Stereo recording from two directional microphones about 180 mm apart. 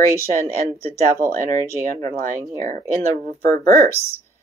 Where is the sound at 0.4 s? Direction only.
15° left (ahead or behind).